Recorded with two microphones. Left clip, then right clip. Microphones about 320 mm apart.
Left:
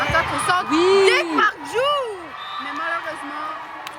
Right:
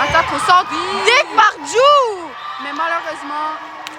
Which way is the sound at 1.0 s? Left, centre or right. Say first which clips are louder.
Right 5 dB; centre.